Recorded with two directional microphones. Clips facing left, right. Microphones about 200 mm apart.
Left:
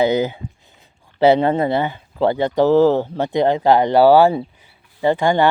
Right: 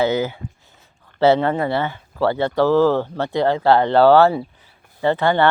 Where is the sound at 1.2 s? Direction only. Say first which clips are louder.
Left 2 dB; 15° left (ahead or behind).